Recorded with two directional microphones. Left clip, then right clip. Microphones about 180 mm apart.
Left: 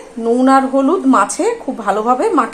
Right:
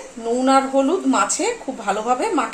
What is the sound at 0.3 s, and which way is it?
A woman's voice, 20° left (ahead or behind).